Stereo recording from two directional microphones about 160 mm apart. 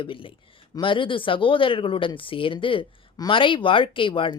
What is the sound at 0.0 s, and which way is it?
Speech, 35° left (ahead or behind).